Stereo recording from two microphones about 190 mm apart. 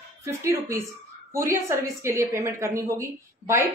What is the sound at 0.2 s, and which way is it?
A woman's voice, 15° right (ahead or behind).